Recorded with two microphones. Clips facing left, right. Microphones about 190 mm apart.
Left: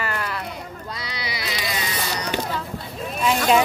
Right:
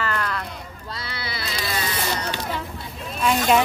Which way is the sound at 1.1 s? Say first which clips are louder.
Left 1 dB; 15° left (ahead or behind).